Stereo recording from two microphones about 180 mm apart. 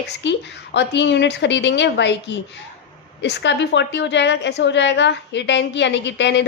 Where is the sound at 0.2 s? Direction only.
75° left (ahead or behind).